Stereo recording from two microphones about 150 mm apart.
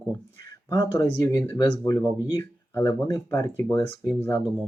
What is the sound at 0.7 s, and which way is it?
Speech, 20° left (ahead or behind).